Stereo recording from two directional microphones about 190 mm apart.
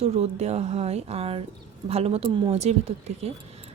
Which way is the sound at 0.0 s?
35° right (ahead or behind).